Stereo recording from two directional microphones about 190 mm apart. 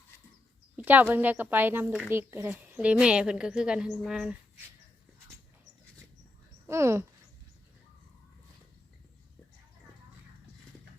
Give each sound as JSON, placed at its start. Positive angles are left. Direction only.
{"t": 0.8, "sound": "a woman's voice", "side_deg": -10}
{"t": 6.7, "sound": "speech", "side_deg": -15}